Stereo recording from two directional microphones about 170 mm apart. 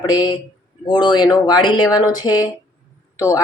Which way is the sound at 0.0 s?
25° left (ahead or behind).